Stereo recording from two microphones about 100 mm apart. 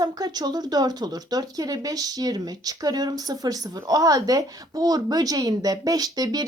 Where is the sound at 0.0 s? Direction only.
40° right (ahead or behind).